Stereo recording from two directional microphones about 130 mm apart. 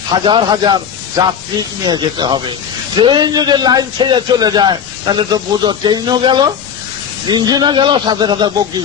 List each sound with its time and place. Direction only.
0.1 s a man's voice: 40° right (ahead or behind)